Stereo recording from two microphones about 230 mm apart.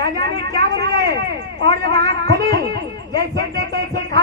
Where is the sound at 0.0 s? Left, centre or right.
Right.